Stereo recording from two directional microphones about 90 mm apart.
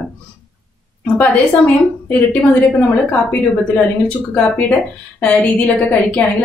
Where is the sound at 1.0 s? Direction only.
15° left (ahead or behind).